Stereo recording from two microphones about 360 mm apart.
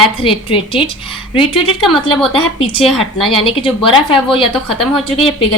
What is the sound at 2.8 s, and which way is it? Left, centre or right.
Speech, centre.